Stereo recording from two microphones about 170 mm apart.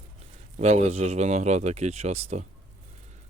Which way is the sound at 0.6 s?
40° right (ahead or behind).